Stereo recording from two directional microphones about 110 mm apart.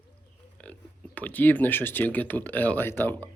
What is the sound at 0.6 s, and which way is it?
Speech, 10° left (ahead or behind).